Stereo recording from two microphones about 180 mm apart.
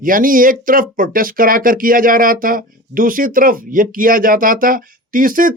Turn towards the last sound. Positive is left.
turn(degrees=-50)  # may be behind; listen again after turning